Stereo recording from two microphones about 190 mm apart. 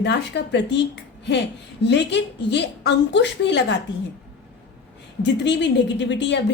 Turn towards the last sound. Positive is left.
turn(degrees=70)  # may be behind; listen again after turning